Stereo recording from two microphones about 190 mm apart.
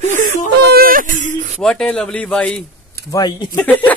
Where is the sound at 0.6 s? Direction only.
55° right (ahead or behind).